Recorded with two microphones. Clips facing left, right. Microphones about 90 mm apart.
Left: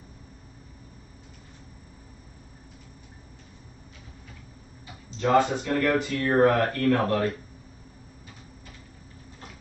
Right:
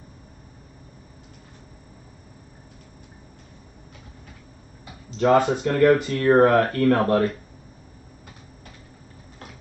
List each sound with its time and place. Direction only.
5.2 s speech: 55° right (ahead or behind)